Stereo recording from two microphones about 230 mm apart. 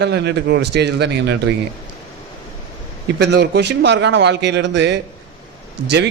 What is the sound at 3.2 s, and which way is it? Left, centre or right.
Speech, right.